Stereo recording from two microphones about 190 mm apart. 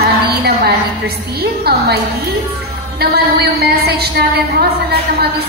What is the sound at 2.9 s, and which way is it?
A man's voice, 55° right (ahead or behind).